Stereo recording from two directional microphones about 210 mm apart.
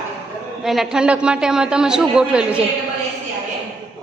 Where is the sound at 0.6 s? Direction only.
Centre (ahead or behind).